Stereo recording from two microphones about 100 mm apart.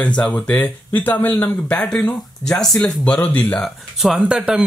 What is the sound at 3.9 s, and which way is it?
Speech, 5° right (ahead or behind).